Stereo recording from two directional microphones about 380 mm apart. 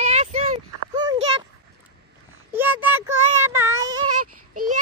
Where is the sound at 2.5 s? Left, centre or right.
Centre.